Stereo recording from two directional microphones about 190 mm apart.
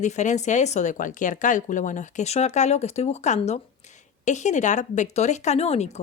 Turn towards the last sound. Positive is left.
turn(degrees=35)  # may be behind; listen again after turning